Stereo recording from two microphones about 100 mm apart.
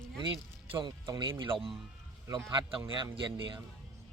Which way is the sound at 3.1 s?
55° right (ahead or behind).